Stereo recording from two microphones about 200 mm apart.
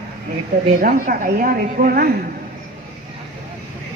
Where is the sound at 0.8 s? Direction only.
45° right (ahead or behind).